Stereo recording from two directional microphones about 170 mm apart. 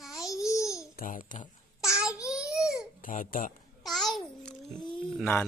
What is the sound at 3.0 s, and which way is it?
Speech, 55° left (ahead or behind).